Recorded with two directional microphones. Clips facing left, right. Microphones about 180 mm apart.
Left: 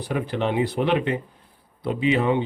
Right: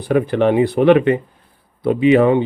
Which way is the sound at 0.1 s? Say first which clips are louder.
Right 10 dB; 55° right (ahead or behind).